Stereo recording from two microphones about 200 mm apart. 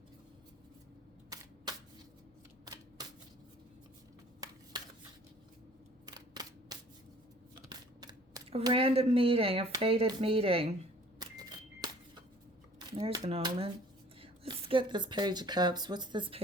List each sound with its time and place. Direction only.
1.3 s camera: 20° right (ahead or behind)
4.7 s a sound: 20° right (ahead or behind)
6.1 s camera: 20° right (ahead or behind)
7.7 s speech: 20° right (ahead or behind)
11.2 s a sound: 20° right (ahead or behind)
13.0 s speech: 30° right (ahead or behind)